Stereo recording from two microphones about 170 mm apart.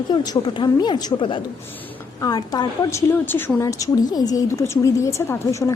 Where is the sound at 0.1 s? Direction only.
25° left (ahead or behind).